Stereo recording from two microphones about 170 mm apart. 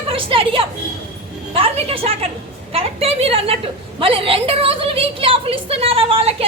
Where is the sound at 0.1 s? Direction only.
30° right (ahead or behind).